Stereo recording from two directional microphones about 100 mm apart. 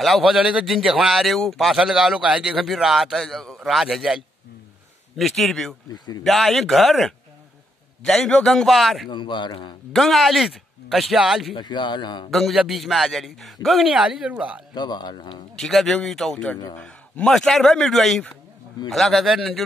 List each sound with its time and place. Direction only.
0.0 s speech: centre (ahead or behind)
5.9 s speech: 40° left (ahead or behind)
6.2 s speech: centre (ahead or behind)
9.1 s a man's voice: 50° left (ahead or behind)
9.9 s a man's voice: centre (ahead or behind)
11.5 s a man's voice: 50° left (ahead or behind)
12.3 s speech: centre (ahead or behind)
14.7 s a man's voice: 45° left (ahead or behind)
15.5 s speech: 5° left (ahead or behind)